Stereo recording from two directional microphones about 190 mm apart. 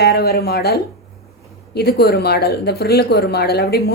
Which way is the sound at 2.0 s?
55° left (ahead or behind).